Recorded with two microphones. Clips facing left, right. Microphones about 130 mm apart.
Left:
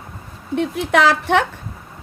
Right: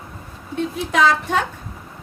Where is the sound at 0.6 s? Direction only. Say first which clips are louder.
Left 2 dB; 70° left (ahead or behind).